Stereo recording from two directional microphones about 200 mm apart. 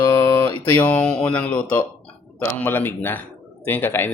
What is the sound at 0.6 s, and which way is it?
Speech, 10° left (ahead or behind).